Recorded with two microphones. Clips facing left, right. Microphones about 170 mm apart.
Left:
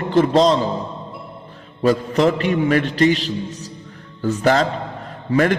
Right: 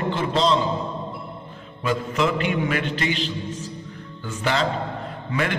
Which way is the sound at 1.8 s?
40° left (ahead or behind).